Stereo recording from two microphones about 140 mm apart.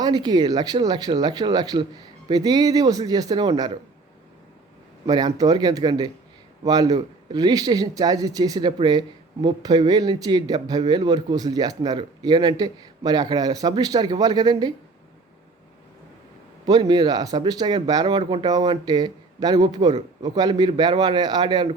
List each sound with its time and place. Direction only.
0.0 s a man's voice: 30° right (ahead or behind)
5.0 s a man's voice: 30° right (ahead or behind)
16.6 s a man's voice: 30° right (ahead or behind)
18.2 s speech: 45° right (ahead or behind)
18.4 s a man's voice: 30° right (ahead or behind)